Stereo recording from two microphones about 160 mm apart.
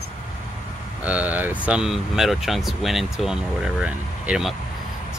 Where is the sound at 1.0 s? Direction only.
10° right (ahead or behind).